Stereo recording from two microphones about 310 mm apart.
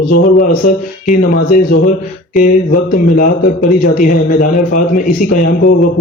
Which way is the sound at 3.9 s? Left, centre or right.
Left.